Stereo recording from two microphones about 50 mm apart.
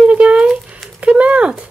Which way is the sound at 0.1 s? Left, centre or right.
Right.